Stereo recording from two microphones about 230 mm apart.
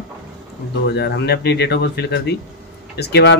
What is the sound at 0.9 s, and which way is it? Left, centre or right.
A man's voice, left.